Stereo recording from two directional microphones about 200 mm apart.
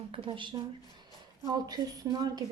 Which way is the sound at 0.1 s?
25° right (ahead or behind).